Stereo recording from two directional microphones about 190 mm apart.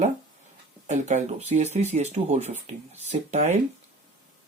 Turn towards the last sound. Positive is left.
turn(degrees=-40)  # may be behind; listen again after turning